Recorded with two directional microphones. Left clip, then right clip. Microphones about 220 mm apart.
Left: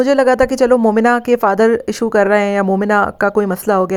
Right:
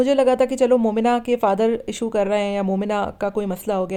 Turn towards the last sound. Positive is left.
turn(degrees=25)  # may be behind; listen again after turning